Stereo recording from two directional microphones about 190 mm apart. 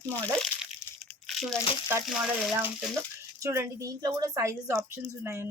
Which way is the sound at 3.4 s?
15° right (ahead or behind).